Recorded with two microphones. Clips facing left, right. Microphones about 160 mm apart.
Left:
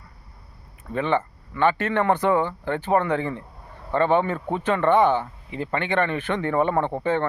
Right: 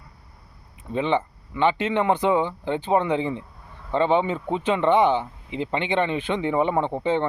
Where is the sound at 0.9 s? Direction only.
15° right (ahead or behind).